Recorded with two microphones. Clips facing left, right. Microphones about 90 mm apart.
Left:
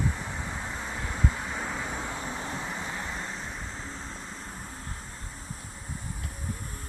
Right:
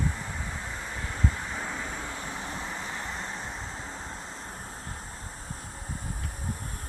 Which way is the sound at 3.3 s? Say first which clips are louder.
Right 1 dB; 15° right (ahead or behind).